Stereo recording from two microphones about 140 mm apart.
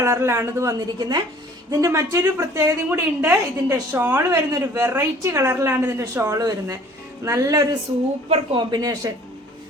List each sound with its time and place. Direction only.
0.0 s a woman's voice: 20° right (ahead or behind)